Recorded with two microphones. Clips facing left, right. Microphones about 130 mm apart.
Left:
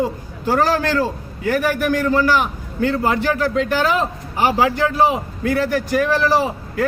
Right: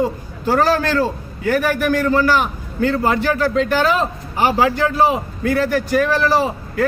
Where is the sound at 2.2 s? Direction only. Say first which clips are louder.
Right 1 dB; 15° left (ahead or behind).